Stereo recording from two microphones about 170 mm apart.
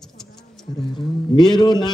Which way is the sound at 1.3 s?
25° left (ahead or behind).